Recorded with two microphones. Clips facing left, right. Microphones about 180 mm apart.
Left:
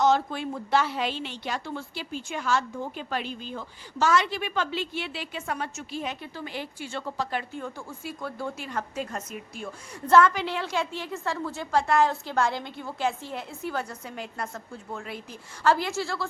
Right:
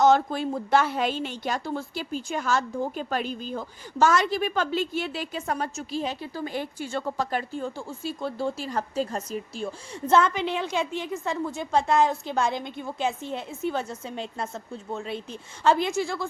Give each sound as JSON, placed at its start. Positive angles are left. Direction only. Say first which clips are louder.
{"t": 0.0, "sound": "a woman's voice", "louder": "right 3 dB", "side_deg": -45}